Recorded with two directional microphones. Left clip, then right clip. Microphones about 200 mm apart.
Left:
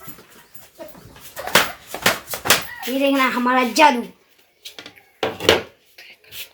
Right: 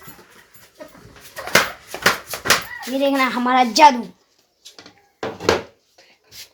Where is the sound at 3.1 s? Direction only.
30° right (ahead or behind).